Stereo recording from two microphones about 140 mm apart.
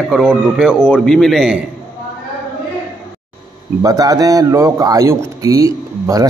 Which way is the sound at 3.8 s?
25° right (ahead or behind).